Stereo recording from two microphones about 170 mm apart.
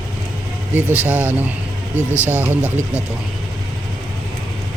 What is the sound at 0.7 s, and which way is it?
Speech, 10° right (ahead or behind).